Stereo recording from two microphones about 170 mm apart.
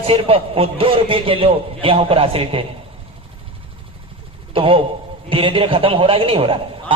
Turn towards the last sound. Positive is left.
turn(degrees=-35)  # may be behind; listen again after turning